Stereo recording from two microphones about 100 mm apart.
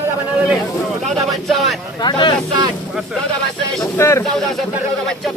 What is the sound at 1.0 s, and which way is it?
Speech, centre (ahead or behind).